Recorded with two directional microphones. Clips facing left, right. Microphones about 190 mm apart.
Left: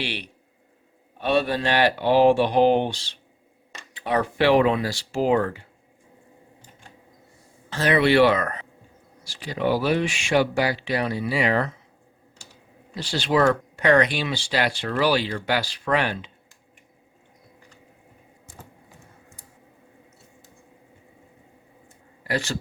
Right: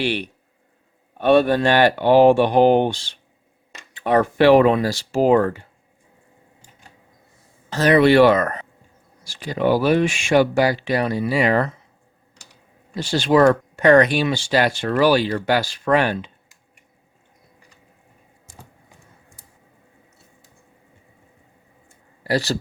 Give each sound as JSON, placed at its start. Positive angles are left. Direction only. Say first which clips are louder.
{"t": 0.0, "sound": "speech", "louder": "right 8 dB", "side_deg": -50}
{"t": 7.7, "sound": "speech", "louder": "right 5 dB", "side_deg": -45}
{"t": 12.9, "sound": "speech", "louder": "right 6 dB", "side_deg": -50}
{"t": 22.2, "sound": "speech", "louder": "right 6 dB", "side_deg": -35}